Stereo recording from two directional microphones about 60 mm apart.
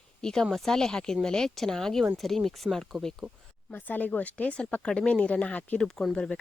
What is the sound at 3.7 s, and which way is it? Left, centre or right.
Speech, left.